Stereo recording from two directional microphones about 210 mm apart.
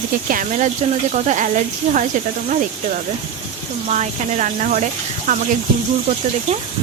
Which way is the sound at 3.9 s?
35° right (ahead or behind).